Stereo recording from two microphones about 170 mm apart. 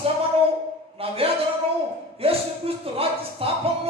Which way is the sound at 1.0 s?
35° right (ahead or behind).